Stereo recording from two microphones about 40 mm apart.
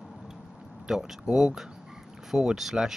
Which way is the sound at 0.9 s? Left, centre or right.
Centre.